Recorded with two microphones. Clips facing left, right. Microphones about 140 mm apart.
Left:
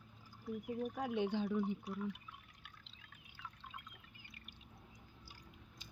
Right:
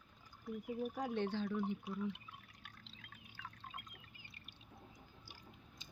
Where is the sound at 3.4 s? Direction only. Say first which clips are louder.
Even; 60° right (ahead or behind).